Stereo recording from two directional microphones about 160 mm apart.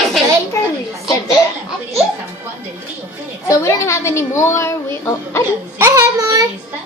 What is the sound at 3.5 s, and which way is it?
A child's voice, 20° left (ahead or behind).